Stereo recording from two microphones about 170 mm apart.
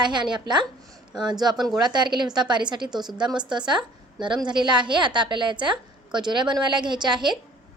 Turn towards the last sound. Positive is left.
turn(degrees=-25)  # may be behind; listen again after turning